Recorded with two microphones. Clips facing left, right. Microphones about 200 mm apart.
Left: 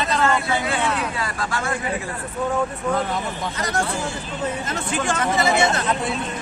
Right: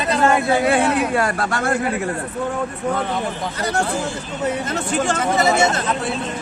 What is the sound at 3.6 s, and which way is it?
Speech, 30° right (ahead or behind).